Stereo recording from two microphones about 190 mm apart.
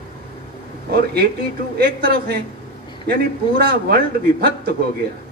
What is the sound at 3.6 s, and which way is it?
A man's voice, 55° right (ahead or behind).